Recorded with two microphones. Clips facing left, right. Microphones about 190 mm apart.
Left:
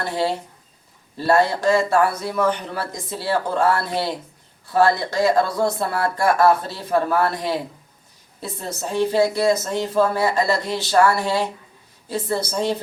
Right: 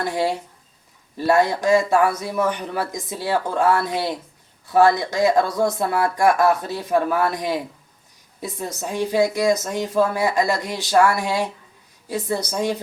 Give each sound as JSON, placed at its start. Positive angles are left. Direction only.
{"t": 0.0, "sound": "speech", "side_deg": -15}